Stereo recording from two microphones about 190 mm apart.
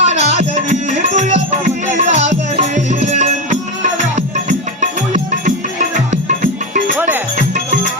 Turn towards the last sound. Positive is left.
turn(degrees=-40)  # may be behind; listen again after turning